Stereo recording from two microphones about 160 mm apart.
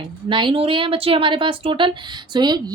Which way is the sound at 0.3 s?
30° right (ahead or behind).